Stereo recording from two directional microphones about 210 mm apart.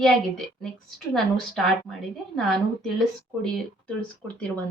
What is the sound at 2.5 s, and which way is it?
A woman's voice, 5° left (ahead or behind).